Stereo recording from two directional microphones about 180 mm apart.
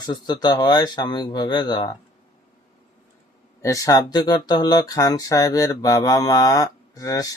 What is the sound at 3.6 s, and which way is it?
Speech, 20° left (ahead or behind).